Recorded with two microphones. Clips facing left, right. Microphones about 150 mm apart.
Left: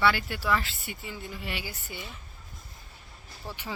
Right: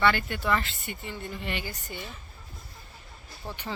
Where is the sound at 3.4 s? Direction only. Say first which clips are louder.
Right 1 dB; 15° right (ahead or behind).